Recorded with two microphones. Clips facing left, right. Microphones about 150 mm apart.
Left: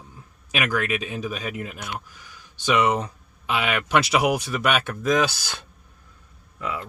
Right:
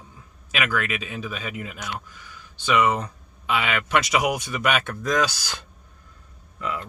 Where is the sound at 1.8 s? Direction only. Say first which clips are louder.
Even; 25° left (ahead or behind).